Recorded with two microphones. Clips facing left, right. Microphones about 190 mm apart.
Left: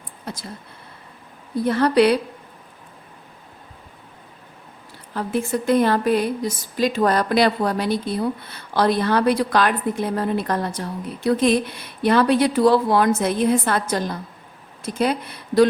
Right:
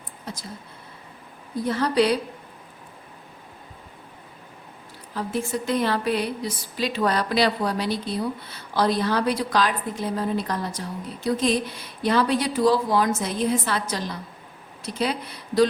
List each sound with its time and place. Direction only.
0.3 s a sound: 60° left (ahead or behind)
1.6 s speech: 60° left (ahead or behind)
5.1 s speech: 55° left (ahead or behind)